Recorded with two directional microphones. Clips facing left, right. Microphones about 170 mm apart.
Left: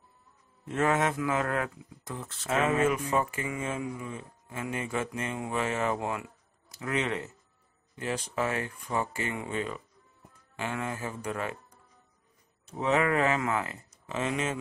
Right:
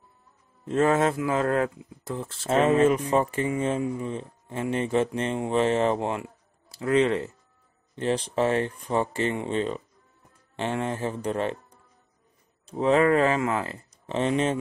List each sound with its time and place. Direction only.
0.7 s speech: 30° right (ahead or behind)
12.6 s speech: 30° right (ahead or behind)